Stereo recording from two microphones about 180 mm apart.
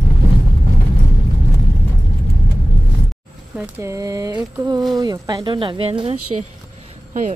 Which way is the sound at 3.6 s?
15° right (ahead or behind).